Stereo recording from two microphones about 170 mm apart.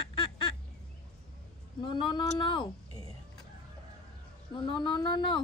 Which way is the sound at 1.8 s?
25° left (ahead or behind).